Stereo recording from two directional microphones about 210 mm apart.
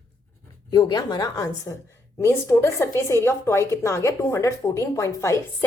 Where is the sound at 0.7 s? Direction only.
20° left (ahead or behind).